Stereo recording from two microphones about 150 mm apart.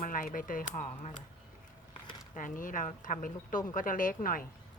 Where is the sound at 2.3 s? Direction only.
60° left (ahead or behind).